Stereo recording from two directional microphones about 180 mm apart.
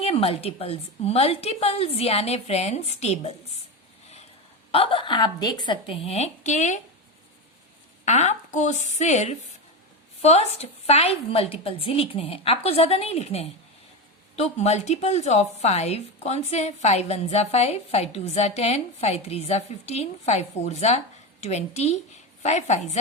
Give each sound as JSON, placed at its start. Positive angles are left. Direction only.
{"t": 0.0, "sound": "a woman's voice", "side_deg": 35}
{"t": 4.7, "sound": "a woman's voice", "side_deg": 30}
{"t": 8.0, "sound": "a woman's voice", "side_deg": 40}